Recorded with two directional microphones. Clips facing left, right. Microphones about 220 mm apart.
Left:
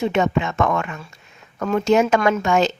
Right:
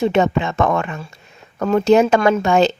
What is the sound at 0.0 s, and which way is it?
Speech, 35° right (ahead or behind).